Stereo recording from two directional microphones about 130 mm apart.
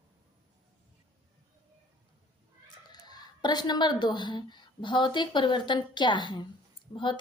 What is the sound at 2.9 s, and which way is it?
A woman's voice, 30° left (ahead or behind).